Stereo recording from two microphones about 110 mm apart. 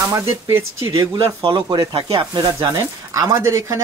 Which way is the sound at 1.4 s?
40° right (ahead or behind).